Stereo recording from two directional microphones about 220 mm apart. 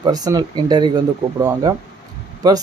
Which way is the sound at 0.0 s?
15° right (ahead or behind).